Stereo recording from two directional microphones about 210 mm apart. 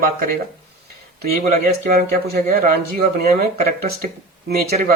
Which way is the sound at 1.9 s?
45° right (ahead or behind).